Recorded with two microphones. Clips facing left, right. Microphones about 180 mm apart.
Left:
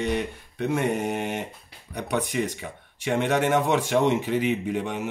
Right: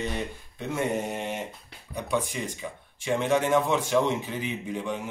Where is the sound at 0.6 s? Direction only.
65° left (ahead or behind).